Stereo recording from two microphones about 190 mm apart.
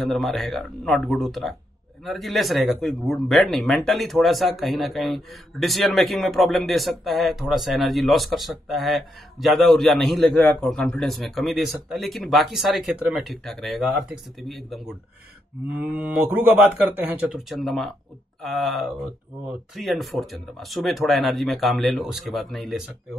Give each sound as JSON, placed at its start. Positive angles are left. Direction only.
{"t": 0.0, "sound": "speech", "side_deg": 0}